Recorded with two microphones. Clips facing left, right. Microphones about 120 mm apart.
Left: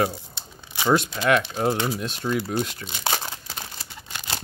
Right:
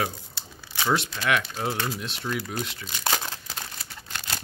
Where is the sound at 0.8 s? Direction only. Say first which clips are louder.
Left 5 dB; 45° left (ahead or behind).